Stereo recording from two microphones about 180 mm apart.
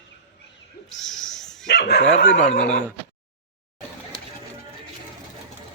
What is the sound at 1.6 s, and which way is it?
Speech, 70° left (ahead or behind).